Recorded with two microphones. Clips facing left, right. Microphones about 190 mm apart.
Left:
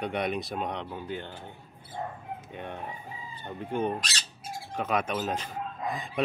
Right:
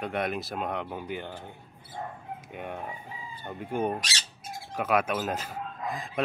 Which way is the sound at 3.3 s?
10° right (ahead or behind).